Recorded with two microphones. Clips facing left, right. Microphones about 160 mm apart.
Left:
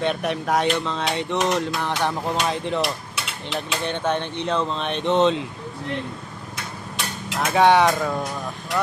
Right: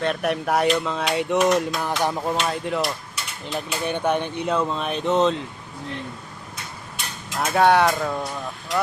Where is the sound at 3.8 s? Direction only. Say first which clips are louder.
Right 3 dB; 10° right (ahead or behind).